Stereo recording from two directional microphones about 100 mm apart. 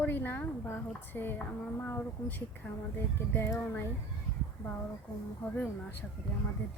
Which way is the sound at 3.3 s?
25° left (ahead or behind).